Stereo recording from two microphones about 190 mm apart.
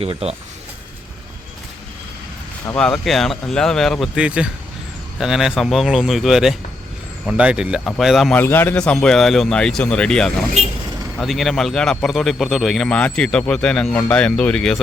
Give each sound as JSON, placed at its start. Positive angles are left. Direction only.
{"t": 0.0, "sound": "speech", "side_deg": -30}
{"t": 2.6, "sound": "a man's voice", "side_deg": 5}